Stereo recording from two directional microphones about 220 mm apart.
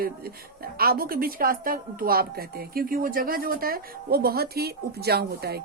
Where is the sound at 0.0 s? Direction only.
40° right (ahead or behind).